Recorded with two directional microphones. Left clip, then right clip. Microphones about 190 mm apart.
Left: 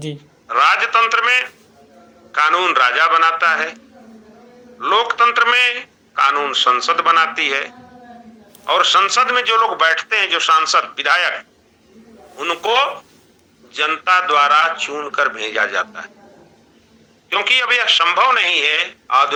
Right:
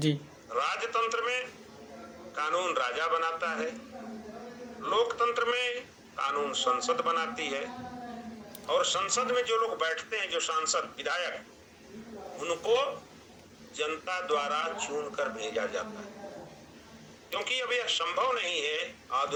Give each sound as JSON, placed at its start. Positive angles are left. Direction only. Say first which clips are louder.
{"t": 0.4, "sound": "a man's voice", "louder": "left 17 dB", "side_deg": 50}
{"t": 4.8, "sound": "a man's voice", "louder": "left 14 dB", "side_deg": 45}
{"t": 17.2, "sound": "a man's voice", "louder": "left 17 dB", "side_deg": 50}